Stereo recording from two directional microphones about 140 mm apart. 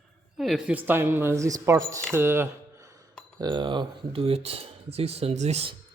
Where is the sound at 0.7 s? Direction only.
15° right (ahead or behind).